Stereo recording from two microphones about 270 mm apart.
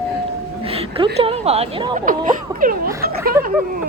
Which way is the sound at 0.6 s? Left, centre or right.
Right.